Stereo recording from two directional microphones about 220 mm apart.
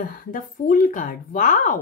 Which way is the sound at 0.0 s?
40° left (ahead or behind).